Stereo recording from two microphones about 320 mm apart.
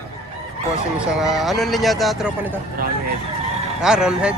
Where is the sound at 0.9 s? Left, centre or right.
Centre.